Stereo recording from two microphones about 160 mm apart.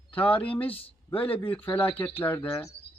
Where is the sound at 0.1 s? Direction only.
10° left (ahead or behind).